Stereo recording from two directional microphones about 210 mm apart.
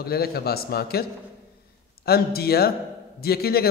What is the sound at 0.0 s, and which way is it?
A man's voice, 45° left (ahead or behind).